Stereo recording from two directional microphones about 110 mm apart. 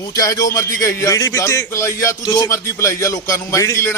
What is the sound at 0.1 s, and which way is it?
Speech, 35° left (ahead or behind).